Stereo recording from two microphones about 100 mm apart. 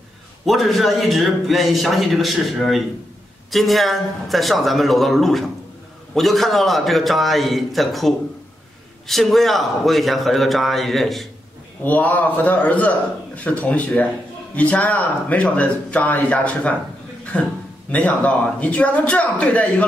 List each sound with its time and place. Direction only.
0.5 s a man's voice: centre (ahead or behind)
11.8 s speech: 15° left (ahead or behind)